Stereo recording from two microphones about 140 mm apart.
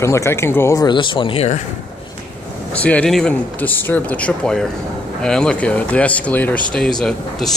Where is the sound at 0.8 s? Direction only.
35° left (ahead or behind).